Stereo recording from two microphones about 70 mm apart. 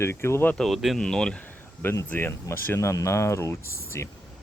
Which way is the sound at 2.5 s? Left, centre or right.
Left.